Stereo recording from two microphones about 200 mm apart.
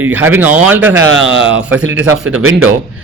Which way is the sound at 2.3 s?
90° right.